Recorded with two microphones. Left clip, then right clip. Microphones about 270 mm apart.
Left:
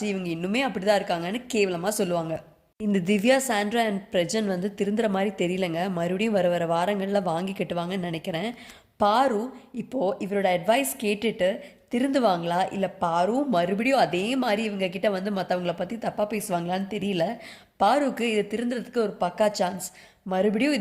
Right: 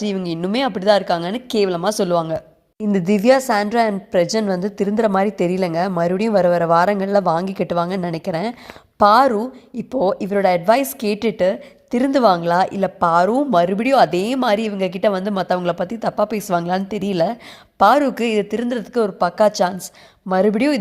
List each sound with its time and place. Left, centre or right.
0.0 s a woman's voice: right